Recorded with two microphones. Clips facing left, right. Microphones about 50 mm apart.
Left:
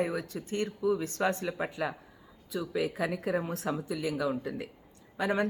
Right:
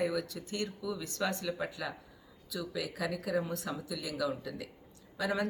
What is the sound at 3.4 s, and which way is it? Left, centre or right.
A woman's voice, left.